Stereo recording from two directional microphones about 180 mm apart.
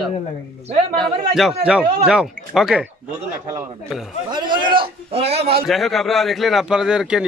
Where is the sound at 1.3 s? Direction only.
5° right (ahead or behind).